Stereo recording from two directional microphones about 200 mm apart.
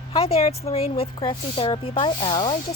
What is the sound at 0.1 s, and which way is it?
Speech, 30° left (ahead or behind).